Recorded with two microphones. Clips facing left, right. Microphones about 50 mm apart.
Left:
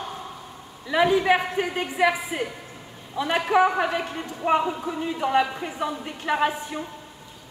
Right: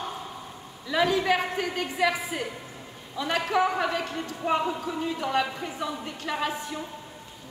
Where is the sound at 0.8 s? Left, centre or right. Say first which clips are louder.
Left 4 dB; centre.